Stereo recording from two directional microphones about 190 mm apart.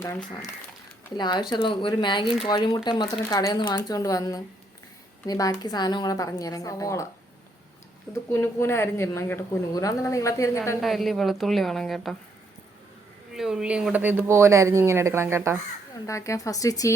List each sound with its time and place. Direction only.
0.0 s speech: 10° left (ahead or behind)
1.1 s speech: 25° left (ahead or behind)
8.1 s speech: 15° left (ahead or behind)
10.8 s a woman's voice: centre (ahead or behind)
13.3 s speech: 5° right (ahead or behind)
16.0 s speech: 15° left (ahead or behind)